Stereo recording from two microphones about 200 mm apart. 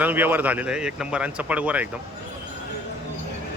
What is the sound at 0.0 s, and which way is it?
A man's voice, 10° right (ahead or behind).